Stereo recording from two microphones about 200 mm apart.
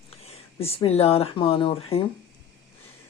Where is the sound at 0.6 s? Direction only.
30° left (ahead or behind).